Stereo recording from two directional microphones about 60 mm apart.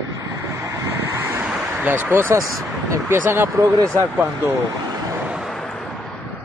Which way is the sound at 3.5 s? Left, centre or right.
Right.